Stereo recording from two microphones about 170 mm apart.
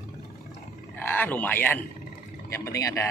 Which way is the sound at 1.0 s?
10° left (ahead or behind).